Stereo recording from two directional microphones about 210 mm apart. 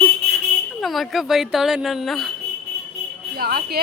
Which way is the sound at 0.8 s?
Centre (ahead or behind).